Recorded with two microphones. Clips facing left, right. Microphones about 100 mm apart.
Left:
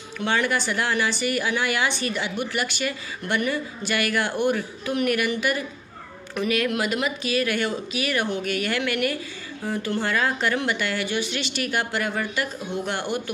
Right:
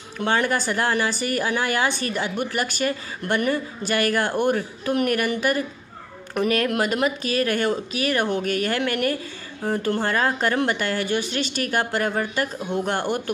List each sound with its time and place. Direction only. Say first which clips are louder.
0.2 s speech: right 2 dB; 40° right (ahead or behind)